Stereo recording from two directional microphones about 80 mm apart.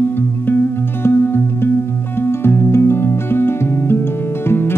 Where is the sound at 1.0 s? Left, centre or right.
Left.